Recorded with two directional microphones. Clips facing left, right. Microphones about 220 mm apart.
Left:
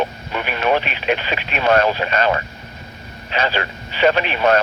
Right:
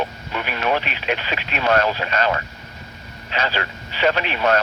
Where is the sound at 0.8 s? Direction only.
55° left (ahead or behind).